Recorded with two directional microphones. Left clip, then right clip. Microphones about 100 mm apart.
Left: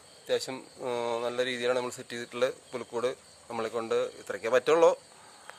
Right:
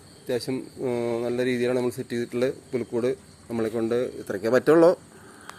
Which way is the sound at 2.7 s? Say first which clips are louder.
Right 6 dB; 30° left (ahead or behind).